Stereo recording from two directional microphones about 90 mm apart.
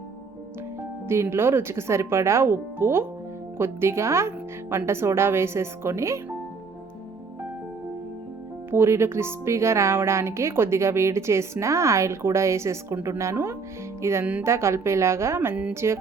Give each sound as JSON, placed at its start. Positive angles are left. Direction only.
{"t": 1.0, "sound": "speech", "side_deg": -30}
{"t": 8.7, "sound": "speech", "side_deg": -25}